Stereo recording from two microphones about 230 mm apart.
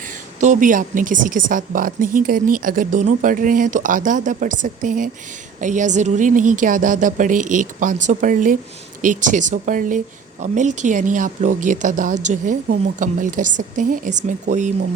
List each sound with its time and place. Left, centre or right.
0.3 s speech: right